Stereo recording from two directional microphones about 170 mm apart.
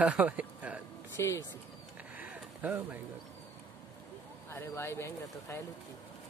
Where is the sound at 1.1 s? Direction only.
15° left (ahead or behind).